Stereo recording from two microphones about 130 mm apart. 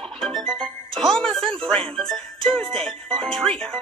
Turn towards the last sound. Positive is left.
turn(degrees=5)  # may be behind; listen again after turning